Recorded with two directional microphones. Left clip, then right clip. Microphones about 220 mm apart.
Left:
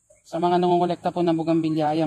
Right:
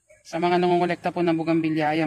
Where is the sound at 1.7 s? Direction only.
20° left (ahead or behind).